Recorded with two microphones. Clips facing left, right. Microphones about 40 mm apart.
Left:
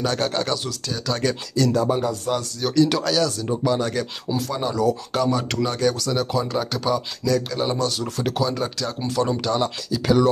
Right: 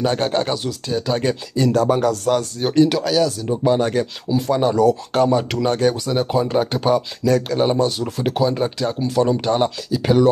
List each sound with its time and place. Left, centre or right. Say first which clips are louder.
0.0 s speech: right 4 dB; right
1.7 s speech: right 7 dB; right
2.6 s speech: right 3 dB; right
2.9 s speech: right 3 dB; centre
3.6 s speech: right 6 dB; right
7.7 s speech: right 4 dB; centre
9.0 s speech: right 4 dB; centre
9.4 s speech: right 4 dB; right
9.8 s speech: right 2 dB; centre